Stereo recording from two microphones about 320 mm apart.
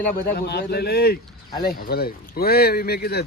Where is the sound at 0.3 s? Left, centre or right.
Left.